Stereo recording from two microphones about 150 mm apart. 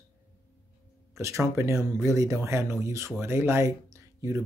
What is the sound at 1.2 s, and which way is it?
Speech, 20° right (ahead or behind).